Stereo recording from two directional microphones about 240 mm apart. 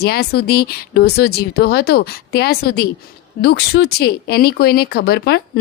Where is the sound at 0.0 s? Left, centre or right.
Left.